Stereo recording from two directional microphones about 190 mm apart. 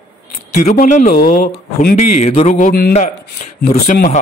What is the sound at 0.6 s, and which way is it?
Speech, 45° left (ahead or behind).